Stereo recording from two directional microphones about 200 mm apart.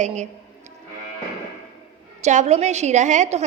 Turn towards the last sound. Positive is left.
turn(degrees=-35)  # may be behind; listen again after turning